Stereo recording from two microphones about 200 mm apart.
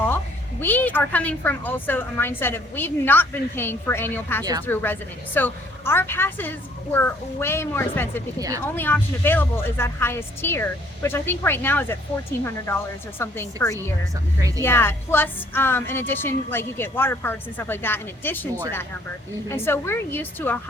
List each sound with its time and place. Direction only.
0.6 s a woman's voice: 10° left (ahead or behind)
8.4 s speech: 15° right (ahead or behind)
8.6 s a woman's voice: 10° left (ahead or behind)